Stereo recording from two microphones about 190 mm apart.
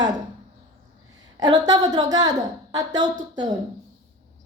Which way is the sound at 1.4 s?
20° right (ahead or behind).